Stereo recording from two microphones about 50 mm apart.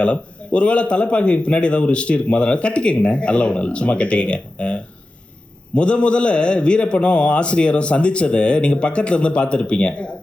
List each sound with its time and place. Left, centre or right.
0.0 s a man's voice: left